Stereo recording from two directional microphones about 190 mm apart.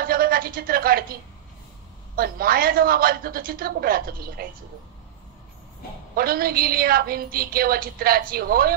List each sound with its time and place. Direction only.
0.0 s a sound: 50° right (ahead or behind)
2.1 s a woman's voice: 50° right (ahead or behind)
6.1 s a woman's voice: 50° right (ahead or behind)